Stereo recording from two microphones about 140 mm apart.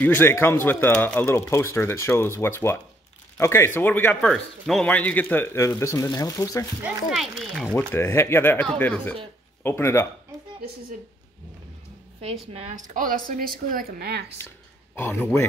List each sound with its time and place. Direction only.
0.0 s speech: 15° left (ahead or behind)
7.1 s speech: centre (ahead or behind)
7.9 s speech: 15° left (ahead or behind)
12.5 s a woman's voice: 65° right (ahead or behind); by 14.0 s 90° right
15.0 s speech: 15° left (ahead or behind)